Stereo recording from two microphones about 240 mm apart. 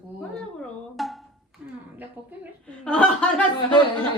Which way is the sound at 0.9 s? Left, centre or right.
Centre.